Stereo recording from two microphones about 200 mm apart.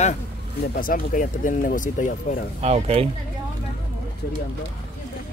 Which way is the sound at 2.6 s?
30° right (ahead or behind).